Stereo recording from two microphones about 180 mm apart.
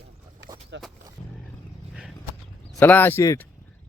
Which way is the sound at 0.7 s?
85° right.